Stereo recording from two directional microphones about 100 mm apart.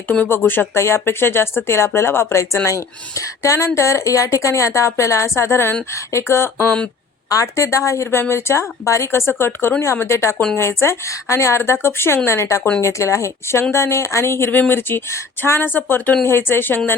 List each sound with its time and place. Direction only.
0.1 s speech: 15° left (ahead or behind)